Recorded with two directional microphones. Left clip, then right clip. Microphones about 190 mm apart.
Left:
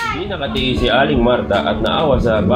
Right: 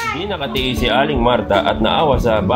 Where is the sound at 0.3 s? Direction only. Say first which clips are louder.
Left 1 dB; 55° right (ahead or behind).